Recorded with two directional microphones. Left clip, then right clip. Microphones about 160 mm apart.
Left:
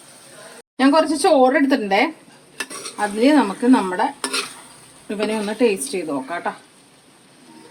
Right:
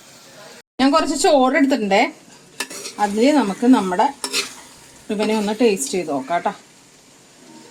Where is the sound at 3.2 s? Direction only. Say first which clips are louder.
Left 1 dB; 40° right (ahead or behind).